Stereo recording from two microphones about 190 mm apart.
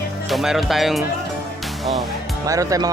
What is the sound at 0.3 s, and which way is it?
Speech, centre (ahead or behind).